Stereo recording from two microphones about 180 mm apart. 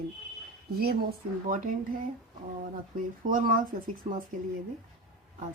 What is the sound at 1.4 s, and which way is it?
Speech, 45° right (ahead or behind).